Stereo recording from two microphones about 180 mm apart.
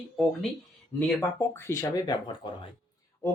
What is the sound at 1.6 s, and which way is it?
Speech, 15° left (ahead or behind).